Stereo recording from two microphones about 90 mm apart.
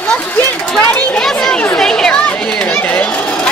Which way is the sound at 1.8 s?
5° left (ahead or behind).